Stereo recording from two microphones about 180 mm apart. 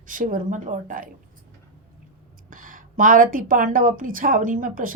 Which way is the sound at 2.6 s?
50° right (ahead or behind).